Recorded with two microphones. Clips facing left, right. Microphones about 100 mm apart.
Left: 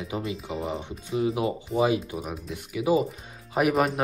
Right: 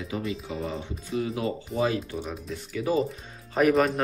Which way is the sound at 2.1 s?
Centre (ahead or behind).